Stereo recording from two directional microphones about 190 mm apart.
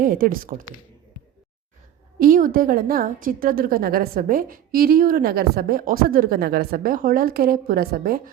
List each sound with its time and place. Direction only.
0.0 s a woman's voice: 45° right (ahead or behind)
2.1 s a woman's voice: 50° right (ahead or behind)